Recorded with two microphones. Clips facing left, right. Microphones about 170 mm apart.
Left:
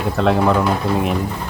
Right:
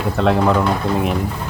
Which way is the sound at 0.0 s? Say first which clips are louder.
Even; centre (ahead or behind).